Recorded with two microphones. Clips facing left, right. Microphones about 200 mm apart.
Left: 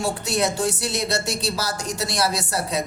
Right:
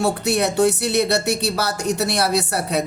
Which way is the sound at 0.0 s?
65° right (ahead or behind).